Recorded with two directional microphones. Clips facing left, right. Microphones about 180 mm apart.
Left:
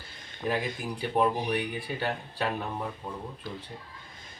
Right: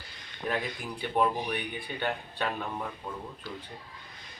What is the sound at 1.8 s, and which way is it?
Speech, 35° left (ahead or behind).